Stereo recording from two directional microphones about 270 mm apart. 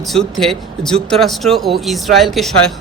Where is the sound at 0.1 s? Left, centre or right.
Centre.